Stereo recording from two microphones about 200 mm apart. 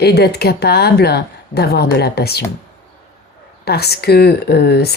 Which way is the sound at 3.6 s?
55° left (ahead or behind).